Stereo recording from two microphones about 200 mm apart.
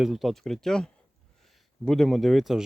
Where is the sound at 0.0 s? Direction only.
Centre (ahead or behind).